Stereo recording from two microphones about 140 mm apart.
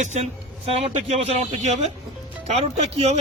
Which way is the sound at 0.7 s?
45° right (ahead or behind).